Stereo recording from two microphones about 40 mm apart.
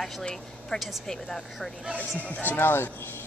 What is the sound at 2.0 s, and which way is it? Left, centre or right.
Speech, left.